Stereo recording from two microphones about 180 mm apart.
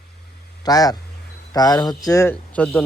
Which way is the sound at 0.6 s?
20° left (ahead or behind).